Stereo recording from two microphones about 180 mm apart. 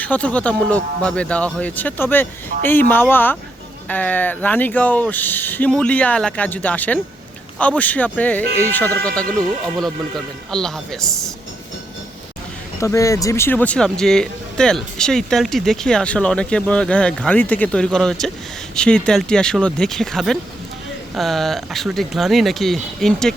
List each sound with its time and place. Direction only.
0.0 s speech: 10° left (ahead or behind)
2.5 s speech: 50° right (ahead or behind)
2.9 s speech: 10° left (ahead or behind)
12.8 s speech: 15° left (ahead or behind)